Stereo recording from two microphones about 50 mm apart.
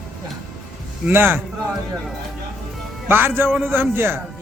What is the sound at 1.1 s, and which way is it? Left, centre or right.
Speech, right.